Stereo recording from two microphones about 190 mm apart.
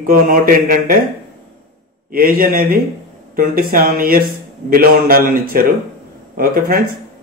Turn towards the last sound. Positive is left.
turn(degrees=-50)  # may be behind; listen again after turning